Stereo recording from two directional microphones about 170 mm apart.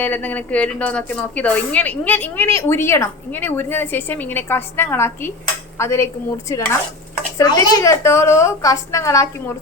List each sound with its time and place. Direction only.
0.0 s a woman's voice: 10° left (ahead or behind)
5.7 s dishes: 15° left (ahead or behind)
6.5 s a woman's voice: 20° left (ahead or behind)